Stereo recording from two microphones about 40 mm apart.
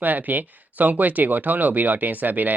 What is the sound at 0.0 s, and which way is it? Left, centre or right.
Speech, right.